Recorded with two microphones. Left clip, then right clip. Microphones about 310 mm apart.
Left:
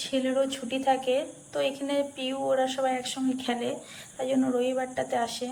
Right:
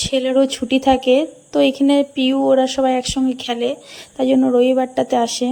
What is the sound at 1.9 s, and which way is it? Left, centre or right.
Speech, centre.